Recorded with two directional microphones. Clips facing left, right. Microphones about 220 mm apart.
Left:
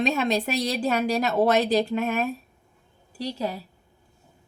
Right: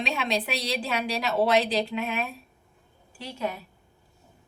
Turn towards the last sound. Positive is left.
turn(degrees=35)  # may be behind; listen again after turning